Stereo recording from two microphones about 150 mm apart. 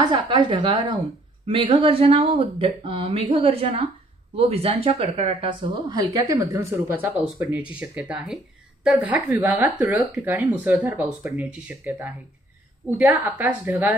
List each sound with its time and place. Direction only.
0.0 s a woman's voice: 30° right (ahead or behind)